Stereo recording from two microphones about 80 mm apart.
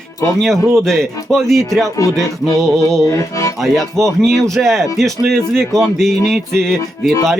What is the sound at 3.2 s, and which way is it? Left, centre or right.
Speech, left.